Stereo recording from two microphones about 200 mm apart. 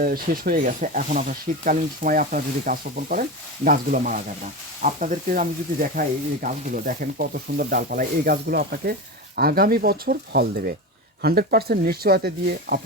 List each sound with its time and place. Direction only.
0.0 s speech: 45° right (ahead or behind)